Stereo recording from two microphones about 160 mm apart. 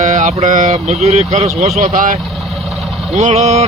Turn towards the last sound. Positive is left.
turn(degrees=-45)  # may be behind; listen again after turning